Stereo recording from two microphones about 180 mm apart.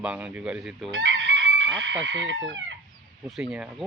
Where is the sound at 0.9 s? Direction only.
90° right.